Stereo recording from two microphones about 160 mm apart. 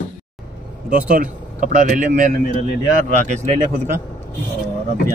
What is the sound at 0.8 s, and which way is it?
Speech, 55° right (ahead or behind).